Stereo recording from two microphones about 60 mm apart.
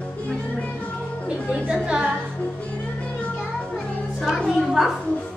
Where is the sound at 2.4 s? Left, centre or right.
Centre.